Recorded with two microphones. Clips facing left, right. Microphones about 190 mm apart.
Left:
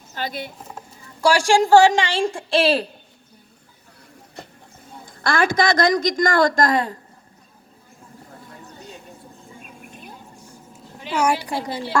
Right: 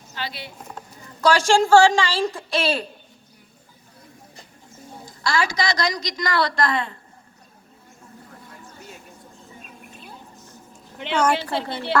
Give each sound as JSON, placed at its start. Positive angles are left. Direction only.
{"t": 0.1, "sound": "a sound", "side_deg": 45}
{"t": 0.7, "sound": "speech", "side_deg": 10}
{"t": 5.0, "sound": "a woman's voice", "side_deg": 55}
{"t": 11.1, "sound": "a woman's voice", "side_deg": 10}